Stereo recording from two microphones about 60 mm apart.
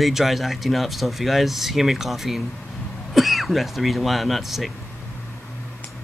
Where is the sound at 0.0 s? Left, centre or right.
Centre.